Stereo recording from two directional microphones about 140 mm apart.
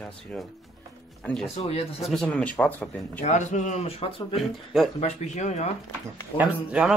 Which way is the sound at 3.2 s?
60° left (ahead or behind).